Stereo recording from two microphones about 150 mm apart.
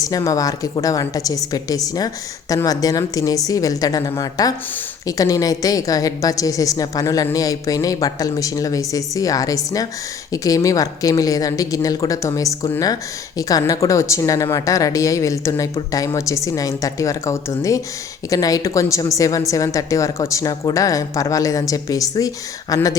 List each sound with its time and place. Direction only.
0.0 s a woman's voice: 25° left (ahead or behind)